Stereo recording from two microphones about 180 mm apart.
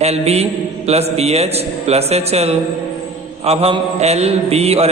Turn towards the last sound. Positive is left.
turn(degrees=-35)  # may be behind; listen again after turning